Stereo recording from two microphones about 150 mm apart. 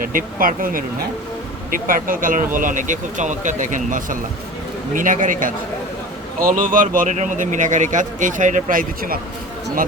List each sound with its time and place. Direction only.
0.0 s a man's voice: 65° right (ahead or behind)